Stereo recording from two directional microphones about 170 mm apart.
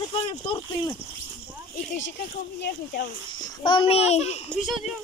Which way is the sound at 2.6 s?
70° left (ahead or behind).